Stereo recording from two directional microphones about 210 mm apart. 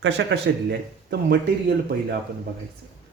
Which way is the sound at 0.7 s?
50° right (ahead or behind).